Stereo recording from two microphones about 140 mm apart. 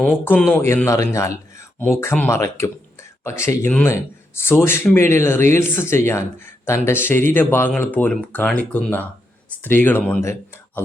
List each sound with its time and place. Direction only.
0.0 s speech: 5° left (ahead or behind)
0.6 s speech: 20° left (ahead or behind)